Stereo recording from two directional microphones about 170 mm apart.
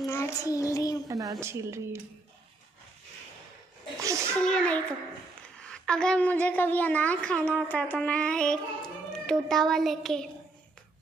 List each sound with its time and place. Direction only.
0.1 s child singing: 15° left (ahead or behind)
0.7 s speech: 20° left (ahead or behind)
1.0 s a woman's voice: 20° right (ahead or behind)
4.0 s a sound: 15° right (ahead or behind)
4.4 s a woman's voice: 5° left (ahead or behind)
9.2 s child singing: 5° left (ahead or behind)